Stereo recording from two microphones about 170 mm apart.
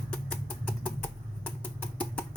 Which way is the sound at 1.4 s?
10° left (ahead or behind).